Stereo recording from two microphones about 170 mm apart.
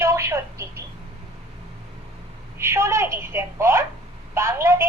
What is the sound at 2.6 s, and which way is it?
A woman's voice, 15° right (ahead or behind).